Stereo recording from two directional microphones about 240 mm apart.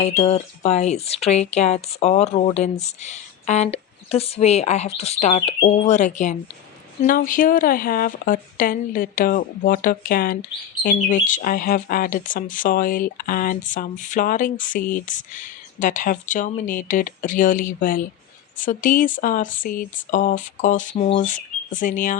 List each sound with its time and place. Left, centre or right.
0.0 s speech: left